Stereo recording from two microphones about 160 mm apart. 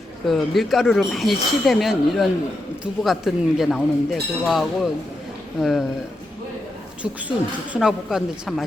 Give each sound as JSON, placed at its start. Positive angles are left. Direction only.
{"t": 0.3, "sound": "speech", "side_deg": 0}
{"t": 7.0, "sound": "speech", "side_deg": -10}